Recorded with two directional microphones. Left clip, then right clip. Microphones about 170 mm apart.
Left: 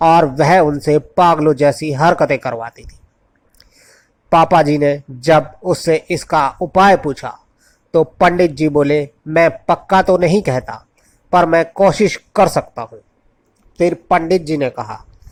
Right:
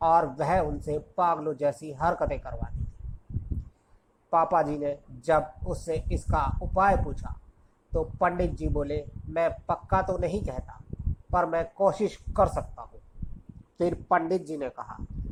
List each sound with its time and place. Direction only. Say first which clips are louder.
0.0 s speech: left 13 dB; 30° left (ahead or behind)
4.3 s a man's voice: left 13 dB; 30° left (ahead or behind)
13.9 s a man's voice: left 9 dB; 30° left (ahead or behind)